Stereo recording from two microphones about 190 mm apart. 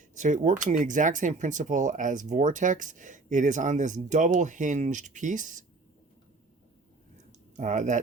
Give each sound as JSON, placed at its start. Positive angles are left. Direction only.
{"t": 0.1, "sound": "speech", "side_deg": -40}
{"t": 7.5, "sound": "speech", "side_deg": -40}